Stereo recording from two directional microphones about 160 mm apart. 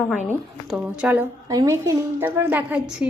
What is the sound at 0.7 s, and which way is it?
Speech, 10° right (ahead or behind).